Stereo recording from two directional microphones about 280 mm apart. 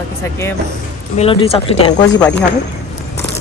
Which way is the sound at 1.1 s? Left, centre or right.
Centre.